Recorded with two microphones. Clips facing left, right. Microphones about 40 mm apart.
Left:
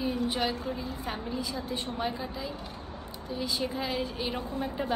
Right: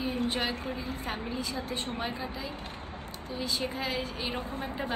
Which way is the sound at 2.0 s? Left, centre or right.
Centre.